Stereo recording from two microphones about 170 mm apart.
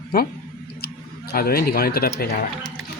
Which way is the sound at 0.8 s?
65° left (ahead or behind).